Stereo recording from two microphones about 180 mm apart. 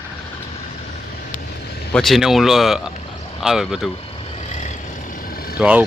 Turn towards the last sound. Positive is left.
turn(degrees=-5)  # may be behind; listen again after turning